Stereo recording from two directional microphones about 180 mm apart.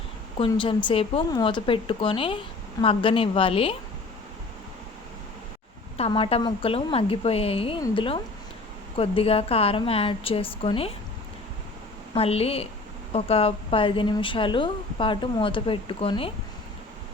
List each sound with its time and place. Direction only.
0.3 s a woman's voice: 25° left (ahead or behind)
6.0 s a woman's voice: 30° left (ahead or behind)
12.1 s a woman's voice: 35° left (ahead or behind)